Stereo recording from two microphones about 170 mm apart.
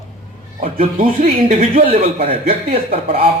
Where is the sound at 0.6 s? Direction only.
55° right (ahead or behind).